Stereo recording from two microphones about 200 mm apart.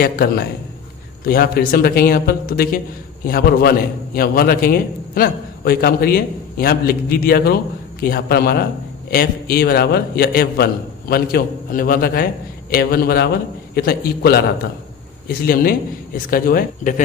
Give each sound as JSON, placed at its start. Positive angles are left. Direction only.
{"t": 0.0, "sound": "a man's voice", "side_deg": 50}